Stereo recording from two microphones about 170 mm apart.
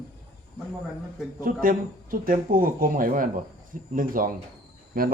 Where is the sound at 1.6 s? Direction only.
55° right (ahead or behind).